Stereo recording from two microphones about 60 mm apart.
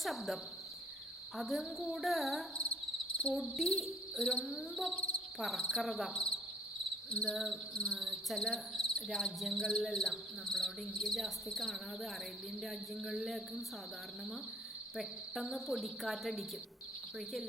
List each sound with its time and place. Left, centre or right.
0.0 s speech: centre
1.4 s speech: centre
4.9 s cricket: centre
5.4 s speech: centre
6.1 s cricket: centre
7.1 s speech: centre
7.3 s speech: centre
7.7 s speech: centre
7.9 s cricket: centre
8.4 s speech: centre
14.9 s speech: centre